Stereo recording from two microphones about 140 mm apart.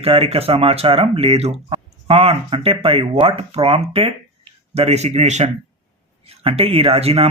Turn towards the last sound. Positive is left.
turn(degrees=-45)  # may be behind; listen again after turning